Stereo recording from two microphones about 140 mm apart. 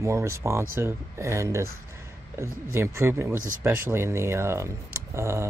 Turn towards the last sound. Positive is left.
turn(degrees=-20)  # may be behind; listen again after turning